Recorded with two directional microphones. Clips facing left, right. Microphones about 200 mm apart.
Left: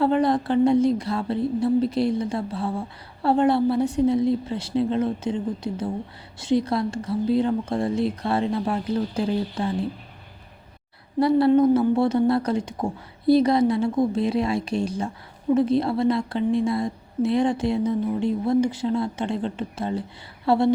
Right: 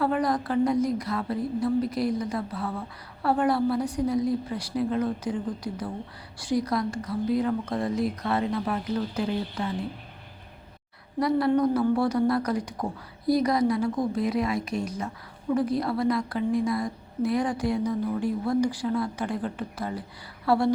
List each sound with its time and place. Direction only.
0.0 s a woman's voice: 25° left (ahead or behind)
11.2 s a woman's voice: 30° left (ahead or behind)